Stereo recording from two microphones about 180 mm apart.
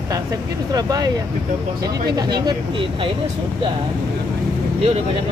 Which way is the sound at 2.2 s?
20° right (ahead or behind).